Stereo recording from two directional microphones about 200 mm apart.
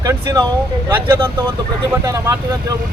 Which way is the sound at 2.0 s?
15° right (ahead or behind).